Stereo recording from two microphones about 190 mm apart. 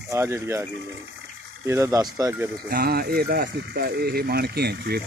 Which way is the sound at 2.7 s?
55° right (ahead or behind).